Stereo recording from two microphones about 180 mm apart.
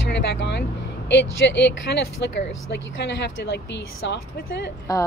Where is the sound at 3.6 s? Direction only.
75° left (ahead or behind).